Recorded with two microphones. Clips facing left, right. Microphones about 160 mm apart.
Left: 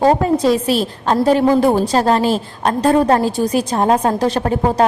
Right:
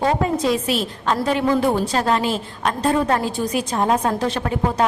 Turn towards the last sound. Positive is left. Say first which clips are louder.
# left 5 dB
turn(degrees=40)  # may be behind; listen again after turning